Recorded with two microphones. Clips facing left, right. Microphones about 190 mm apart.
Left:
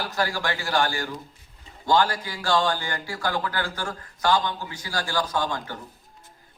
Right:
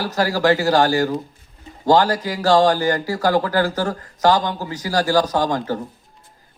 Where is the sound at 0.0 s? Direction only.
40° right (ahead or behind).